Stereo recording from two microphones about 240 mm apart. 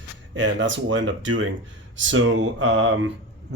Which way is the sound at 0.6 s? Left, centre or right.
Right.